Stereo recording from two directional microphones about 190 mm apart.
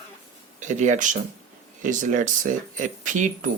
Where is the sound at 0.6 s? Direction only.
40° right (ahead or behind).